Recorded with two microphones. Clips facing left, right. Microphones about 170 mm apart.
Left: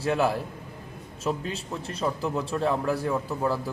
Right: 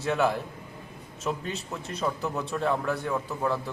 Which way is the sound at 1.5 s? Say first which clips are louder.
Left 1 dB; 30° left (ahead or behind).